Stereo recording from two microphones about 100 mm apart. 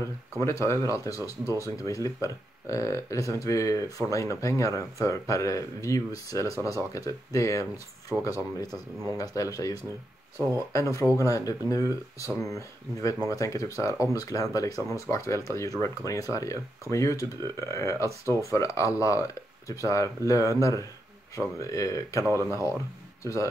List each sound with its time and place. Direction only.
0.4 s speech: 30° left (ahead or behind)
1.4 s speech: 30° right (ahead or behind)
1.9 s speech: 35° left (ahead or behind)
23.2 s speech: 30° left (ahead or behind)